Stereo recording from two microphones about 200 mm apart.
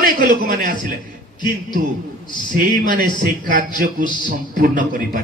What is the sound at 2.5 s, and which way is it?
A man's voice, 40° right (ahead or behind).